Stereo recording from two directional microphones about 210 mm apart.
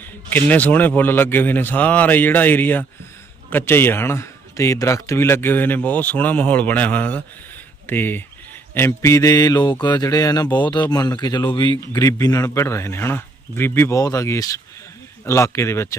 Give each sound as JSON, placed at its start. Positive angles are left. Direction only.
{"t": 0.3, "sound": "speech", "side_deg": 10}